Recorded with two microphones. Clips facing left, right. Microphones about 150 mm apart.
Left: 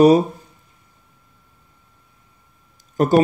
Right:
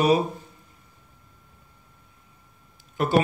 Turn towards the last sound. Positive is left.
turn(degrees=40)  # may be behind; listen again after turning